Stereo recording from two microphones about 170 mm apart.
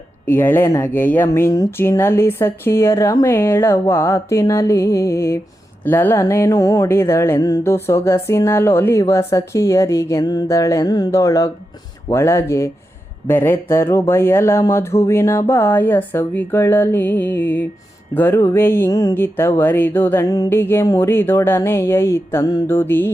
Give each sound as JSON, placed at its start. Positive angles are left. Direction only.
{"t": 0.3, "sound": "music", "side_deg": 15}